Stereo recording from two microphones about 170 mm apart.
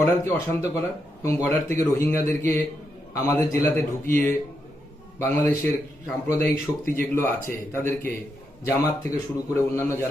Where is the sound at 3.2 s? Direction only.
20° left (ahead or behind).